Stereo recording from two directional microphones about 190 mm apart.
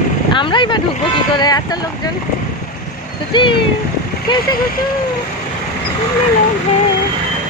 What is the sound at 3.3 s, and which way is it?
Speech, 25° left (ahead or behind).